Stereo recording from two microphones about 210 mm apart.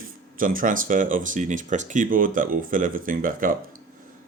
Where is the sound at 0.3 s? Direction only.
40° right (ahead or behind).